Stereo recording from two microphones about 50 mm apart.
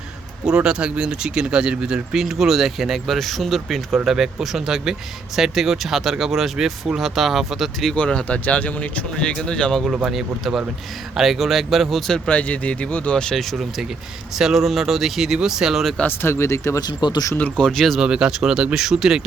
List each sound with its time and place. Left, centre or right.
0.4 s speech: centre
7.9 s speech: left
9.1 s speech: centre
10.1 s speech: centre
12.3 s speech: left
13.3 s speech: centre
16.0 s speech: left
16.5 s speech: left
17.6 s speech: centre
18.0 s speech: centre